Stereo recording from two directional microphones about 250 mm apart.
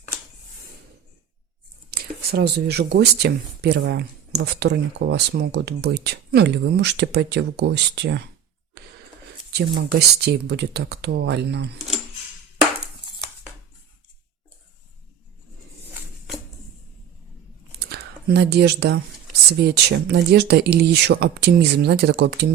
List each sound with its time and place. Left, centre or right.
1.9 s speech: right
9.5 s speech: right
17.8 s speech: right